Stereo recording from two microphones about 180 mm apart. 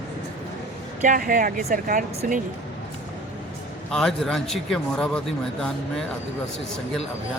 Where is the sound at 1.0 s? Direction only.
50° right (ahead or behind).